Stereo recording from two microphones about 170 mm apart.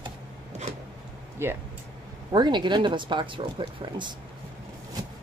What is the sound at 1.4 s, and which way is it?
Speech, 15° right (ahead or behind).